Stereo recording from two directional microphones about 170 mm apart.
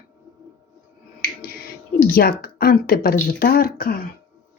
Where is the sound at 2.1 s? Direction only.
60° left (ahead or behind).